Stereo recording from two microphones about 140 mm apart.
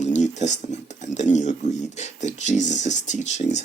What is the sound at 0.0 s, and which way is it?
Dishes, 55° left (ahead or behind).